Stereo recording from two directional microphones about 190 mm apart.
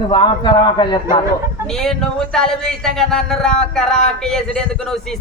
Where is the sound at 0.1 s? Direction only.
25° left (ahead or behind).